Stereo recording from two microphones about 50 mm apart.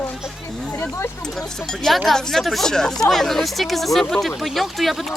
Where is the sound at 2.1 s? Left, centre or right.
Centre.